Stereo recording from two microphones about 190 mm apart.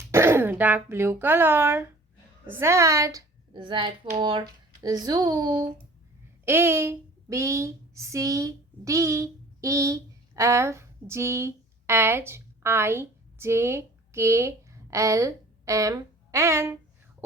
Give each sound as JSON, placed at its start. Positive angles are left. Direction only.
{"t": 0.1, "sound": "speech", "side_deg": -15}
{"t": 6.4, "sound": "speech", "side_deg": -10}